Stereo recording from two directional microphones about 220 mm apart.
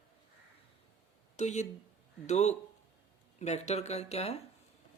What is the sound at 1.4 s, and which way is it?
Speech, 30° left (ahead or behind).